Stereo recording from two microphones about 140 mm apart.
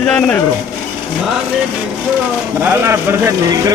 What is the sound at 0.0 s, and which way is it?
Speech, 10° left (ahead or behind).